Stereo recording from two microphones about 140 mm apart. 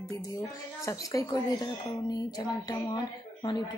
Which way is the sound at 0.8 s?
25° left (ahead or behind).